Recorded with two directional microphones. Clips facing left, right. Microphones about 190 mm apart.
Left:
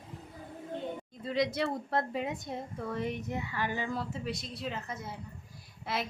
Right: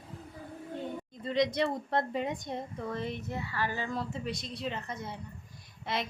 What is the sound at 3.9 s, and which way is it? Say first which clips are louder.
A woman's voice: right 1 dB; centre (ahead or behind).